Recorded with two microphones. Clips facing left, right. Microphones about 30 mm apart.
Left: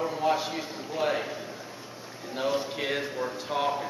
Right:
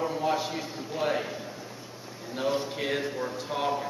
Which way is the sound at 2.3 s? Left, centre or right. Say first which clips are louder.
Even; centre.